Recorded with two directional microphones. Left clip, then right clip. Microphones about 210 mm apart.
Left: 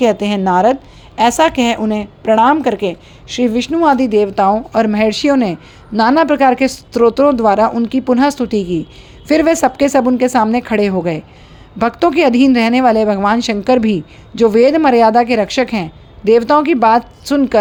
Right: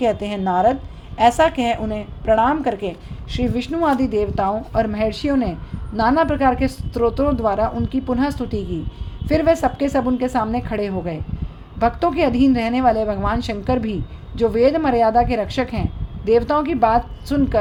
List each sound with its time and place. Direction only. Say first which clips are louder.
0.0 s a woman's voice: left 7 dB; 30° left (ahead or behind)